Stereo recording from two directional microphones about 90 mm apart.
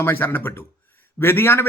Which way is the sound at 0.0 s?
25° left (ahead or behind).